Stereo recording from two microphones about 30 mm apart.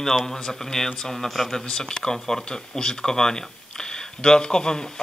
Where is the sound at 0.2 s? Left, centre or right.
Centre.